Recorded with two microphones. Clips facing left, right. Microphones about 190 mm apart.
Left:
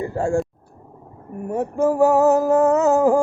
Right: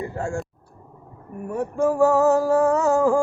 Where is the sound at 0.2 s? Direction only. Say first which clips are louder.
Left 9 dB; 30° left (ahead or behind).